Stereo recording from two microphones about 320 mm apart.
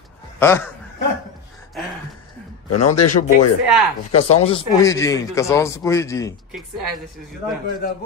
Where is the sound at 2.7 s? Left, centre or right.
Left.